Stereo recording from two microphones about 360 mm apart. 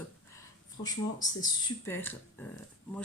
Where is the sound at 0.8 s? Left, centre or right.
Centre.